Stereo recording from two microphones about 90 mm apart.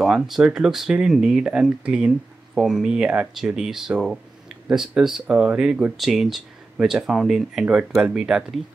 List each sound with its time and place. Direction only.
0.0 s speech: 5° right (ahead or behind)